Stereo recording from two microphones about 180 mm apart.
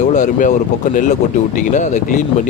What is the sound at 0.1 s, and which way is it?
Speech, 45° left (ahead or behind).